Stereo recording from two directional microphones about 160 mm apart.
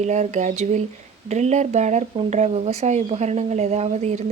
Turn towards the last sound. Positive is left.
turn(degrees=-45)  # may be behind; listen again after turning